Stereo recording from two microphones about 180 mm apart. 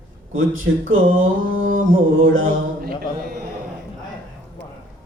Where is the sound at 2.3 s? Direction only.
90° right.